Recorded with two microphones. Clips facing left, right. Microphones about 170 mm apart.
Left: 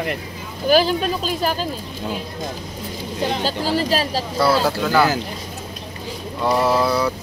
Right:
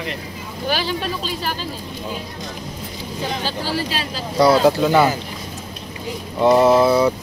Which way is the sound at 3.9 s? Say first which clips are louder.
Left 6 dB; 40° left (ahead or behind).